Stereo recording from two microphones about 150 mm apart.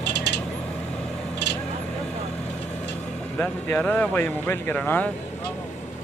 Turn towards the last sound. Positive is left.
turn(degrees=10)  # may be behind; listen again after turning